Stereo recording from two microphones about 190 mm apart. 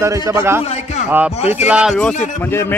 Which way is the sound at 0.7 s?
35° left (ahead or behind).